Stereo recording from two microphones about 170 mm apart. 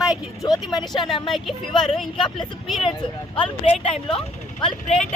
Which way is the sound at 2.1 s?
30° left (ahead or behind).